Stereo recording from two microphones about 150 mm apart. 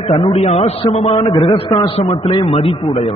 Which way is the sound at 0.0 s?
40° left (ahead or behind).